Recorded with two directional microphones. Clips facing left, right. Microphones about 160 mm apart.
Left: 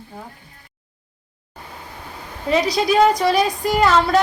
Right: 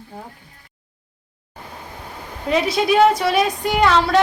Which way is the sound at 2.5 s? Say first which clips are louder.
Even; centre (ahead or behind).